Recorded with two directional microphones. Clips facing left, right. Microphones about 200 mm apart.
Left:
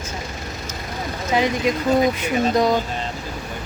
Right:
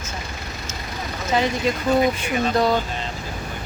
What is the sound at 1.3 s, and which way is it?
Speech, 15° left (ahead or behind).